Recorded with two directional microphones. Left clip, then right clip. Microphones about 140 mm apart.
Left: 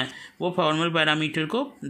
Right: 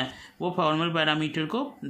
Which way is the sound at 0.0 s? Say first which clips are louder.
Left 3 dB; 25° left (ahead or behind).